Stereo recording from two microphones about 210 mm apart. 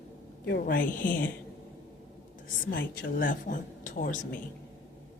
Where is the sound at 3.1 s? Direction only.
40° left (ahead or behind).